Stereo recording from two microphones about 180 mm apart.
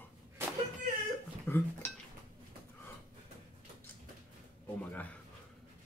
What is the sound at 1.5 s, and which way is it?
Dishes, 15° left (ahead or behind).